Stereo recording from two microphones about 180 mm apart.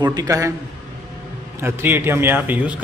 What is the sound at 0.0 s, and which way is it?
Speech, 20° right (ahead or behind).